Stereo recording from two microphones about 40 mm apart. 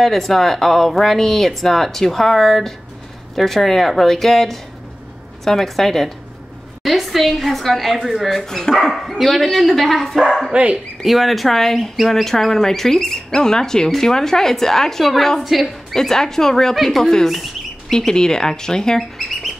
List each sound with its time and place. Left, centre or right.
0.0 s a woman's voice: centre
8.5 s speech: centre
8.7 s a woman's voice: centre
10.5 s speech: right
11.1 s a woman's voice: centre
15.9 s speech: centre
17.3 s bird: centre
17.9 s speech: centre